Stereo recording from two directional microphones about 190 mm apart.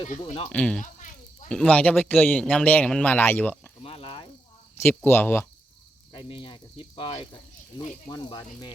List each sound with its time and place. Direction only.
0.1 s cricket: 35° left (ahead or behind)
0.5 s speech: 5° left (ahead or behind)
0.8 s a sound: 40° left (ahead or behind)
1.5 s speech: 5° left (ahead or behind)
3.8 s snake: 30° left (ahead or behind)
4.8 s speech: 10° left (ahead or behind)
6.1 s cricket: 25° left (ahead or behind)